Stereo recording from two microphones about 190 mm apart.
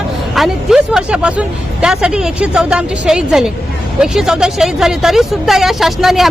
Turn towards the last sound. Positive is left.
turn(degrees=0)  # may be behind; listen again after turning